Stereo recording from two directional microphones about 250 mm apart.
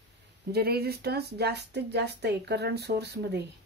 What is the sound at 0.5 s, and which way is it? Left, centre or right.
Speech, right.